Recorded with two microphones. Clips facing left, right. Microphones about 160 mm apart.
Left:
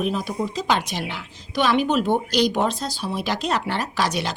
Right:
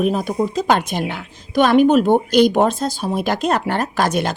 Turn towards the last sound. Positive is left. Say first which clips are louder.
# right 5 dB
turn(degrees=-50)  # may be behind; listen again after turning